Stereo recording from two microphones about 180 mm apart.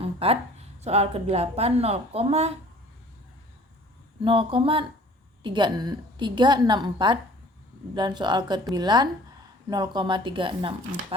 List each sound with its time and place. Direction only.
0.0 s a sound: 30° right (ahead or behind)
0.9 s a woman's voice: 35° right (ahead or behind)
4.2 s a woman's voice: 30° right (ahead or behind)